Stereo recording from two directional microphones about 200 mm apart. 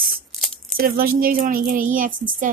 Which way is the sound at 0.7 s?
45° right (ahead or behind).